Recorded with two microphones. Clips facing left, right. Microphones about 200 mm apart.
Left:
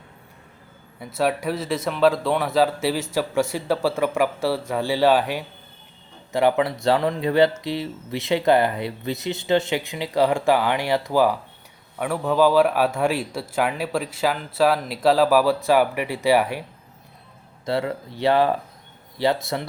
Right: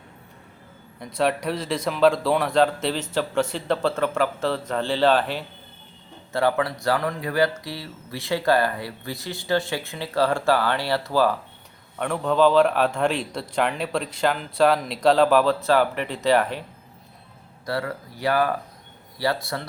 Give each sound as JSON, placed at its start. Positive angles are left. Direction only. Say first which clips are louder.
{"t": 0.9, "sound": "speech", "louder": "even", "side_deg": 5}
{"t": 17.7, "sound": "speech", "louder": "left 4 dB", "side_deg": 25}